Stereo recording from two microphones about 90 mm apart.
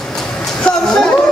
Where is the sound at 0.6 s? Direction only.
5° left (ahead or behind).